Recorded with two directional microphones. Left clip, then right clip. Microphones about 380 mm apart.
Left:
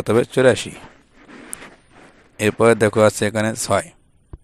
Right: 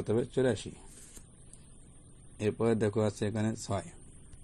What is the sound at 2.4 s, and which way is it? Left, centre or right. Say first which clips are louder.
A man's voice: left 15 dB; left.